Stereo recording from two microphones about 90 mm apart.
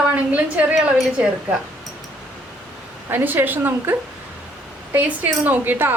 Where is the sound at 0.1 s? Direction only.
15° right (ahead or behind).